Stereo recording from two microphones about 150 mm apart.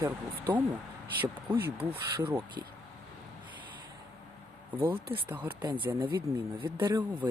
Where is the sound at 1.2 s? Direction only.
15° right (ahead or behind).